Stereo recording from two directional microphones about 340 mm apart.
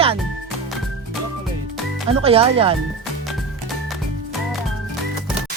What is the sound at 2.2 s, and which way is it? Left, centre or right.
Speech, centre.